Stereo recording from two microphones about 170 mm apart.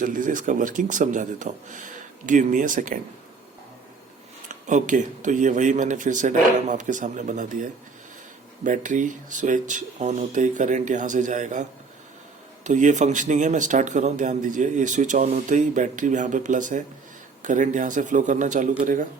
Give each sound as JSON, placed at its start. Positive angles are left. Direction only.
{"t": 0.0, "sound": "speech", "side_deg": -50}
{"t": 4.4, "sound": "speech", "side_deg": -45}
{"t": 12.6, "sound": "speech", "side_deg": -45}